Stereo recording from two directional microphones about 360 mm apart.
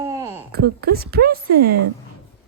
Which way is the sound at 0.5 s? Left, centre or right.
Right.